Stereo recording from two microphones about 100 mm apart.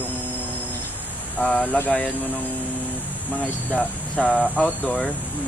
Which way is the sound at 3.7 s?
10° left (ahead or behind).